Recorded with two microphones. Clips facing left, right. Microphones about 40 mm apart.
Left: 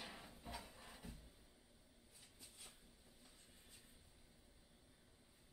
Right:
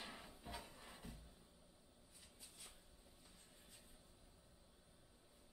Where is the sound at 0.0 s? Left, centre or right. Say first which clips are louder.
Even; centre.